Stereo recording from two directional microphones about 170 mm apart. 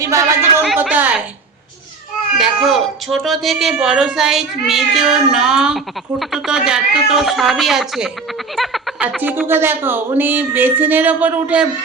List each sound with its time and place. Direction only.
0.0 s speech: 20° right (ahead or behind)
0.8 s a sound: 10° right (ahead or behind)
2.4 s speech: centre (ahead or behind)